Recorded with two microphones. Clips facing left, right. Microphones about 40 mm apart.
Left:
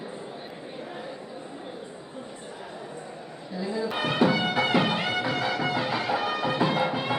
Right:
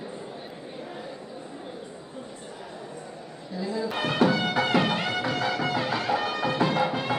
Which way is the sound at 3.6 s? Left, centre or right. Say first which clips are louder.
Even; centre.